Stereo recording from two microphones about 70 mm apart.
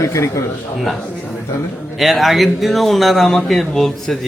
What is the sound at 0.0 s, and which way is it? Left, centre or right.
Speech, left.